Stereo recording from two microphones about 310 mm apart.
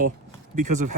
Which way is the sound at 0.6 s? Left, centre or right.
Right.